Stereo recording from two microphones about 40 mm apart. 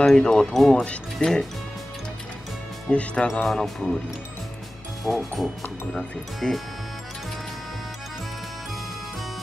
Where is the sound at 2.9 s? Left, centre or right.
Left.